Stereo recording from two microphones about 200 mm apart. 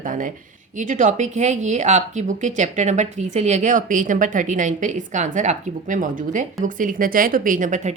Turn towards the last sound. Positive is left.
turn(degrees=-40)  # may be behind; listen again after turning